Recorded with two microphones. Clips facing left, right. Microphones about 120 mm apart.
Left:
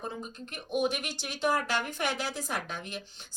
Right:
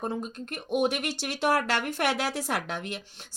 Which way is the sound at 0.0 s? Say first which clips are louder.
Right 6 dB; 55° right (ahead or behind).